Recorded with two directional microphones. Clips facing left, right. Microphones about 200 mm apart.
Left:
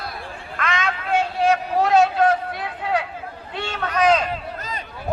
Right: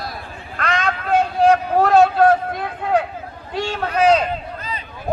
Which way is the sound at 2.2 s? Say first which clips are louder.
Right 4 dB; 50° right (ahead or behind).